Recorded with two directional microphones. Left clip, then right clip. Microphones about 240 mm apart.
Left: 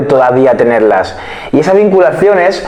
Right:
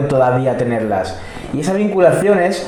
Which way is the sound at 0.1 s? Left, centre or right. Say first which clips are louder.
Left 8 dB; left.